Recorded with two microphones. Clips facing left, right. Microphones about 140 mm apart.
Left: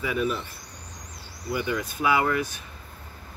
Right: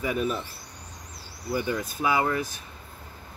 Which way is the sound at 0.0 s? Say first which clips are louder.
Left 1 dB; 35° right (ahead or behind).